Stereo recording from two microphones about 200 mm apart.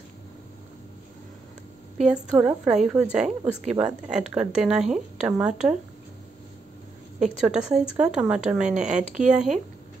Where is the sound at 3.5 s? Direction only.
35° right (ahead or behind).